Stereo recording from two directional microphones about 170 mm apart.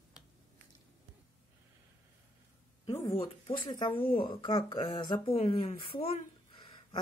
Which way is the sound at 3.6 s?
30° left (ahead or behind).